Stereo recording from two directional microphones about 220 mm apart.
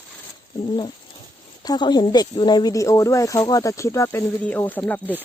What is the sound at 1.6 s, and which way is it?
Speech, 20° left (ahead or behind).